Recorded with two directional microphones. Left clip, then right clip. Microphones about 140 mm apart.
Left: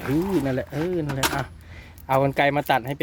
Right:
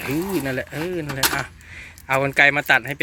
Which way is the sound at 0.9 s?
20° left (ahead or behind).